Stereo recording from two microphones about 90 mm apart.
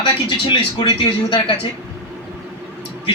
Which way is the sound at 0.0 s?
65° left (ahead or behind).